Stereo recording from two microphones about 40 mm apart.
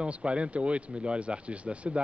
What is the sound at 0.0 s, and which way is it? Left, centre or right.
Speech, right.